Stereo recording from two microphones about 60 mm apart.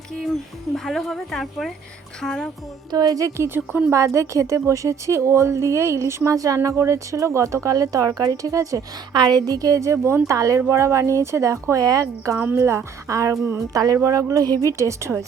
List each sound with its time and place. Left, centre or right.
0.9 s speech: centre
2.9 s a woman's voice: right
3.4 s speech: right
3.9 s a woman's voice: right
6.3 s speech: right
9.4 s a woman's voice: right
9.8 s speech: right
10.2 s speech: right
10.7 s a woman's voice: right
12.5 s a woman's voice: right
13.7 s speech: right
14.7 s a woman's voice: right